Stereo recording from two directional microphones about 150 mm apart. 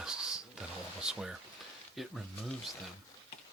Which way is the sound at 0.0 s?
5° right (ahead or behind).